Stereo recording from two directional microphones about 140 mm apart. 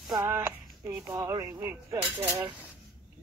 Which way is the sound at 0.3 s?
15° right (ahead or behind).